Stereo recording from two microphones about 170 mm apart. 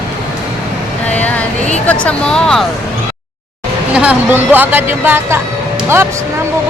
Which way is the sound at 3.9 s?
5° right (ahead or behind).